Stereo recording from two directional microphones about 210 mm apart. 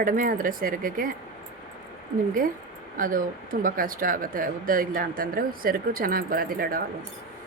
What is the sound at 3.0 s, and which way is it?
Speech, 40° right (ahead or behind).